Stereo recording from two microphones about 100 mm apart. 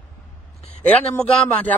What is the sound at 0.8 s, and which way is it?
Speech, 15° left (ahead or behind).